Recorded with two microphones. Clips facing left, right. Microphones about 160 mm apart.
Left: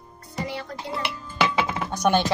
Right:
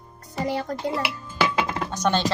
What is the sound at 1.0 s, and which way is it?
Chink, 5° right (ahead or behind).